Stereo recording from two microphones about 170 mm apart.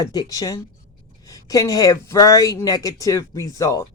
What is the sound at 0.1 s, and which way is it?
Speech, 20° left (ahead or behind).